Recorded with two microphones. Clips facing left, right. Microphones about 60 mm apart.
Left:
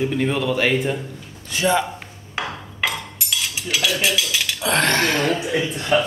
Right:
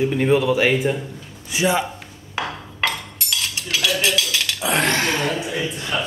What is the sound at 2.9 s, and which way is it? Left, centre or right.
Chink, centre.